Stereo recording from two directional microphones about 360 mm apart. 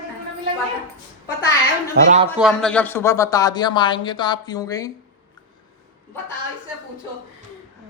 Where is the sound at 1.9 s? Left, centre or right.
Right.